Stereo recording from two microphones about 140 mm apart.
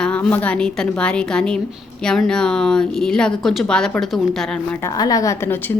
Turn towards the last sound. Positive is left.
turn(degrees=15)  # may be behind; listen again after turning